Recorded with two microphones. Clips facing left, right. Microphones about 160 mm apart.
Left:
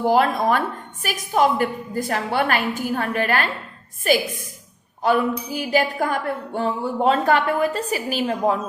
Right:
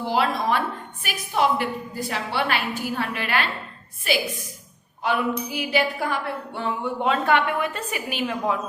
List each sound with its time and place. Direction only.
0.0 s a woman's voice: 45° left (ahead or behind)